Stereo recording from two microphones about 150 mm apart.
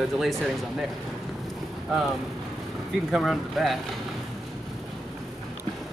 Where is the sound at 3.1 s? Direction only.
Centre (ahead or behind).